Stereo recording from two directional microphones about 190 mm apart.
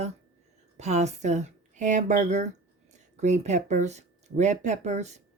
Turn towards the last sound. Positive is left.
turn(degrees=-35)  # may be behind; listen again after turning